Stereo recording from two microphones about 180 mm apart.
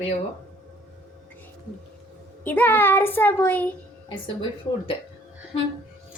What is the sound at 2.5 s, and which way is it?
A child's voice, 10° left (ahead or behind).